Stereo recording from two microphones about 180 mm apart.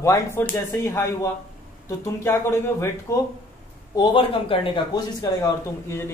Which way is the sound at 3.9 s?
25° left (ahead or behind).